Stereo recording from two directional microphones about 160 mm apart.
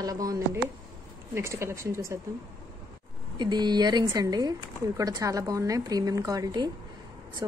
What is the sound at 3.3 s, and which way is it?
Speech, 25° right (ahead or behind).